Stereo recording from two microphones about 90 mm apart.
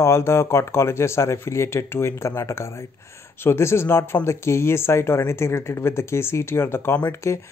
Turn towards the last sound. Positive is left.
turn(degrees=20)  # may be behind; listen again after turning